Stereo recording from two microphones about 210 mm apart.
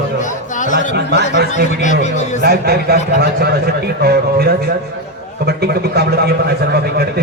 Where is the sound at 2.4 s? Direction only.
50° right (ahead or behind).